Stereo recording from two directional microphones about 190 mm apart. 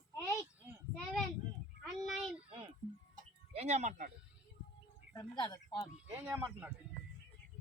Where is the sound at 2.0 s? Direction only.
Centre (ahead or behind).